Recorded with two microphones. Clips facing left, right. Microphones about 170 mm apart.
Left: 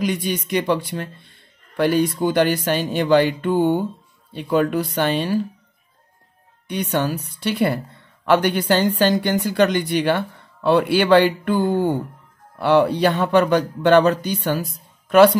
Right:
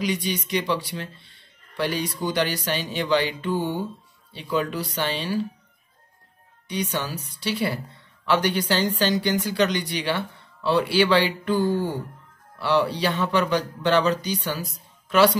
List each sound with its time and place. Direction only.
0.0 s a woman's voice: 55° left (ahead or behind)
6.7 s a woman's voice: 55° left (ahead or behind)